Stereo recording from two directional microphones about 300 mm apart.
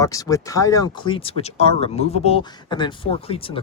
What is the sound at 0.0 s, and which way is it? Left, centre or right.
Speech, centre.